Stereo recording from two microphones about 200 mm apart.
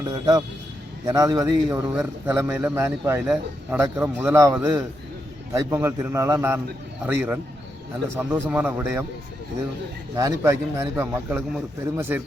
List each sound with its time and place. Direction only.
0.0 s a man's voice: 20° right (ahead or behind)
10.2 s a man's voice: 15° right (ahead or behind)